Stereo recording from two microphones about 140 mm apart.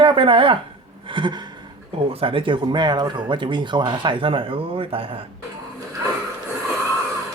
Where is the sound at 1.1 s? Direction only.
35° right (ahead or behind).